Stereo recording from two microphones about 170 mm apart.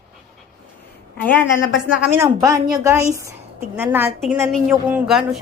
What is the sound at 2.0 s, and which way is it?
A woman's voice, 15° right (ahead or behind).